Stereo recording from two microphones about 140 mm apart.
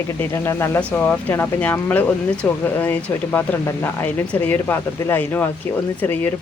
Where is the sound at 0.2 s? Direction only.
20° left (ahead or behind).